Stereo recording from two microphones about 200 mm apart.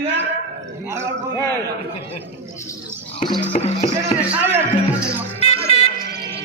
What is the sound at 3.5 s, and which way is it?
Speech, 35° left (ahead or behind).